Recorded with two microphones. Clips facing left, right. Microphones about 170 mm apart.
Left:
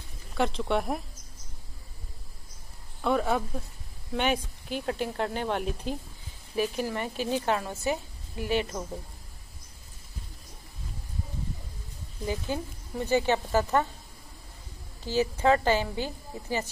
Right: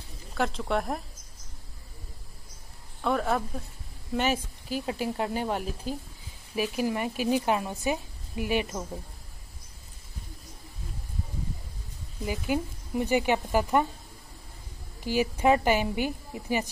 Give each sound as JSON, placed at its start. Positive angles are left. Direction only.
{"t": 0.4, "sound": "speech", "side_deg": 0}
{"t": 3.0, "sound": "a woman's voice", "side_deg": 0}
{"t": 12.3, "sound": "a woman's voice", "side_deg": -15}
{"t": 15.0, "sound": "a woman's voice", "side_deg": -15}